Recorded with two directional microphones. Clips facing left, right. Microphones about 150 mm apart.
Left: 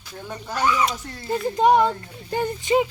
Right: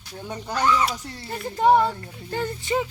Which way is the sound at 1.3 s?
20° left (ahead or behind).